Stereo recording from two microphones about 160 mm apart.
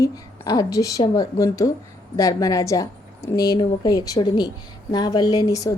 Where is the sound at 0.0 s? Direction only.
25° left (ahead or behind).